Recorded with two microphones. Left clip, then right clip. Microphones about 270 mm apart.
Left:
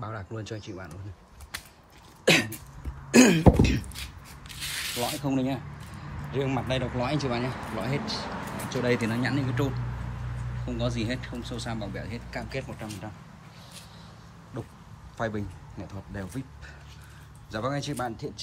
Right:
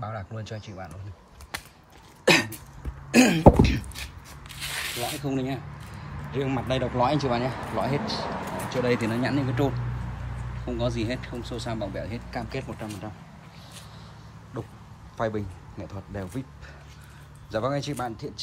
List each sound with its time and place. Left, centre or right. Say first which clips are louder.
0.0 s speech: right 1 dB; centre
2.2 s cough: right 2 dB; centre
4.5 s spray: right 1 dB; right
5.2 s speech: left 1 dB; centre
10.8 s speech: right 2 dB; centre
14.5 s speech: right 3 dB; centre
17.5 s speech: right 3 dB; centre